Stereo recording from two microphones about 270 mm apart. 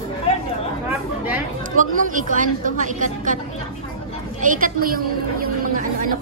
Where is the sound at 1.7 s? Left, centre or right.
Right.